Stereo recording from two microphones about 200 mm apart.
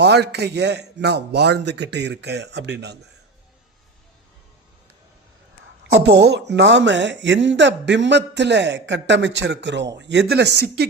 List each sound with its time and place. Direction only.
0.0 s speech: 55° right (ahead or behind)
5.9 s speech: 55° right (ahead or behind)